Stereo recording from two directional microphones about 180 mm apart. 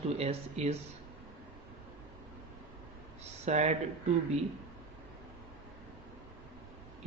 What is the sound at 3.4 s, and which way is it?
Speech, 40° right (ahead or behind).